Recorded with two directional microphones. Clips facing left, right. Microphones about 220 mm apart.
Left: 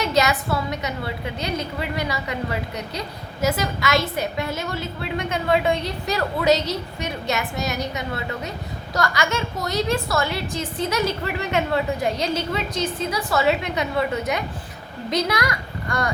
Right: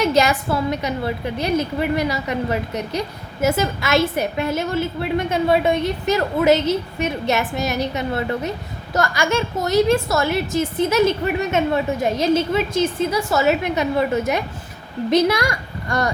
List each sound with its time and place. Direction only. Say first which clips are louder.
0.0 s a woman's voice: right 4 dB; 30° right (ahead or behind)